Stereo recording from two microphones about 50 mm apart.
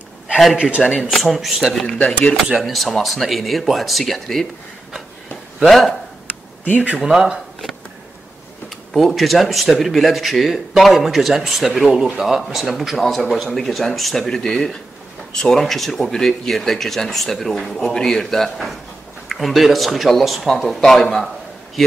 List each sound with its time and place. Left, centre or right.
0.6 s speech: right
1.1 s speech: centre
2.0 s speech: centre
2.6 s speech: centre
5.7 s speech: centre
7.0 s speech: centre
8.6 s speech: centre